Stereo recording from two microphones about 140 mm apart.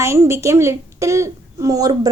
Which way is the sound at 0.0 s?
20° right (ahead or behind).